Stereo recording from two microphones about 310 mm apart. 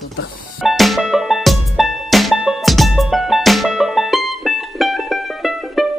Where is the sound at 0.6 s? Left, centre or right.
Centre.